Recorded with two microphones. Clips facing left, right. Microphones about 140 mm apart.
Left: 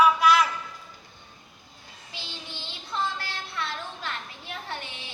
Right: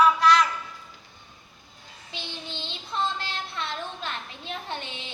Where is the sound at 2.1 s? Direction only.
20° right (ahead or behind).